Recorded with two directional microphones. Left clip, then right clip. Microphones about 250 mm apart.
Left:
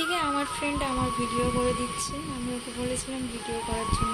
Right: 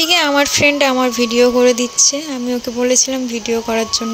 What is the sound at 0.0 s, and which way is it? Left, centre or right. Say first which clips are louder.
Speech: right 14 dB; right.